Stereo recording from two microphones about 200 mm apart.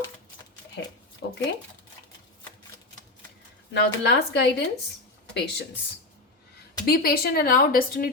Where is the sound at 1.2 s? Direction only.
60° left (ahead or behind).